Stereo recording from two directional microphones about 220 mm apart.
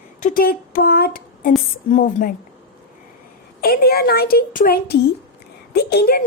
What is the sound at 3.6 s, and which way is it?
Speech, 45° left (ahead or behind).